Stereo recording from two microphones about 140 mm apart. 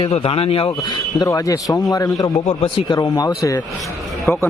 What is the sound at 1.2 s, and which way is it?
Speech, 25° left (ahead or behind).